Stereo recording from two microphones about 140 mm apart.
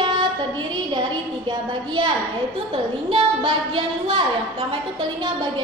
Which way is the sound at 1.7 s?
35° right (ahead or behind).